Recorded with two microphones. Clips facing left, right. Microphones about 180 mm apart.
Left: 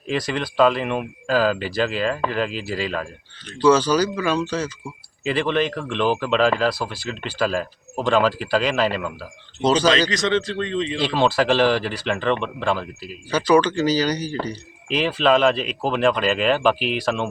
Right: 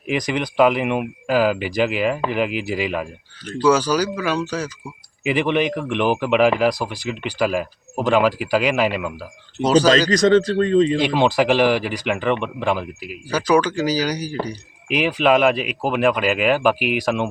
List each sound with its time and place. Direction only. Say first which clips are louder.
0.1 s speech: right 2 dB; 15° right (ahead or behind)
10.1 s speech: right 7 dB; 45° right (ahead or behind)
11.0 s speech: right 2 dB; 15° right (ahead or behind)